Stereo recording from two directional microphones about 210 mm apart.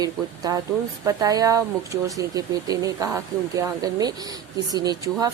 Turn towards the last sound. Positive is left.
turn(degrees=-20)  # may be behind; listen again after turning